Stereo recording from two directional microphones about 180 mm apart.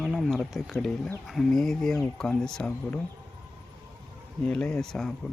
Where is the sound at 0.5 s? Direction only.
Centre (ahead or behind).